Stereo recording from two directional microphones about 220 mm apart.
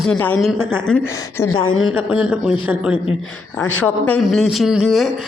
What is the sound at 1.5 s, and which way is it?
Speech, 65° left (ahead or behind).